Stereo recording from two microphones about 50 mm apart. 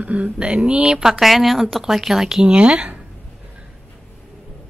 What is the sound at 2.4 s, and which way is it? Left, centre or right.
Speech, right.